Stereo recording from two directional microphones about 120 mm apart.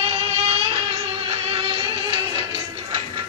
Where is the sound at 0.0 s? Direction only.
60° right (ahead or behind).